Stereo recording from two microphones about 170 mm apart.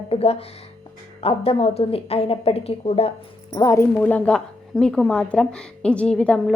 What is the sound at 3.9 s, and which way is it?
A woman's voice, 10° left (ahead or behind).